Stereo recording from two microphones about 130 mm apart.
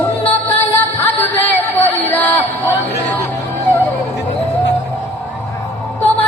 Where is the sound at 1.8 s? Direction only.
15° left (ahead or behind).